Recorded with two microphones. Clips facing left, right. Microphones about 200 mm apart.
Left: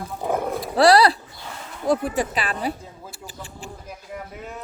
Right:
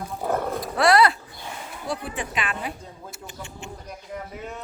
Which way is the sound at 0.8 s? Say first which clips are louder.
Left 4 dB; 35° left (ahead or behind).